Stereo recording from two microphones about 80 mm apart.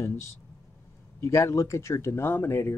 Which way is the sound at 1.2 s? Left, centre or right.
Left.